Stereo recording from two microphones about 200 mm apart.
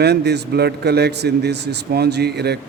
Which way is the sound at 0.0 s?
55° right (ahead or behind).